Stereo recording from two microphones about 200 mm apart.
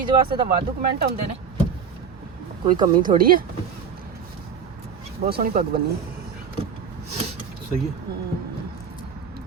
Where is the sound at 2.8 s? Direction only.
45° right (ahead or behind).